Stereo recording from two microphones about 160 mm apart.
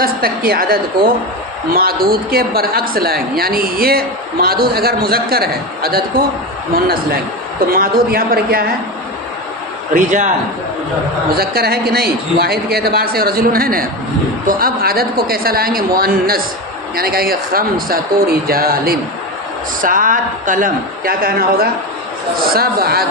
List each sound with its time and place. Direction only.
0.0 s a woman's voice: 70° right (ahead or behind)
9.9 s a man's voice: 50° right (ahead or behind)
11.3 s a woman's voice: 75° right (ahead or behind)
19.8 s a woman's voice: 55° right (ahead or behind); by 23.0 s 75° right (ahead or behind)